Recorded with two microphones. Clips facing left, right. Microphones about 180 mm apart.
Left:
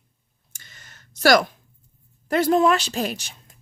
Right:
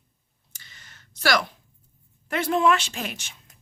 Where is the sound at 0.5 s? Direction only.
45° left (ahead or behind).